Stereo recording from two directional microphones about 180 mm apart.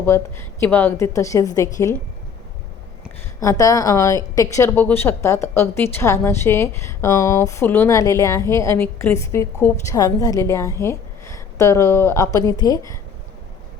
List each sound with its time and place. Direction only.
0.0 s a woman's voice: 15° left (ahead or behind)
3.4 s a woman's voice: 20° left (ahead or behind)